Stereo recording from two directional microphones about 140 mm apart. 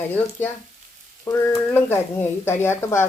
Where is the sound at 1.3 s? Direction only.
20° left (ahead or behind).